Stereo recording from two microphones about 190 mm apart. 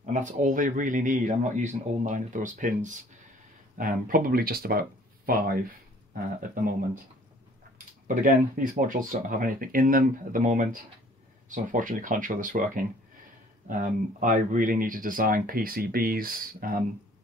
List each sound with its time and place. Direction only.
0.0 s speech: 40° right (ahead or behind)
8.1 s speech: 45° right (ahead or behind)